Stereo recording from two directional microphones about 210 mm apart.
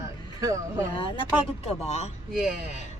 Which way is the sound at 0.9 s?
25° left (ahead or behind).